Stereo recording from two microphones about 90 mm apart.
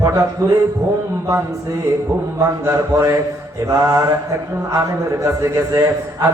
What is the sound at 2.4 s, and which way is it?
A man's voice, 35° right (ahead or behind).